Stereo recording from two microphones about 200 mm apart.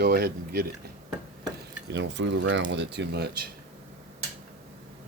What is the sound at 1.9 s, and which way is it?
Speech, 60° right (ahead or behind).